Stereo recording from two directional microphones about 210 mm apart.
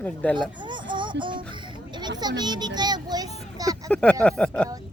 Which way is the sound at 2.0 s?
20° right (ahead or behind).